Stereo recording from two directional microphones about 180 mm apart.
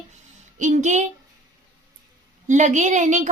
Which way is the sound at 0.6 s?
45° right (ahead or behind).